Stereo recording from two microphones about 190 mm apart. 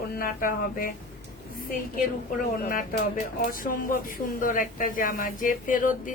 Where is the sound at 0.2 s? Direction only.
45° left (ahead or behind).